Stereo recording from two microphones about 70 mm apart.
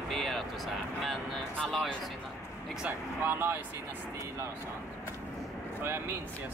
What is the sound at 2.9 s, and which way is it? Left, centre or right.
Vehicle, right.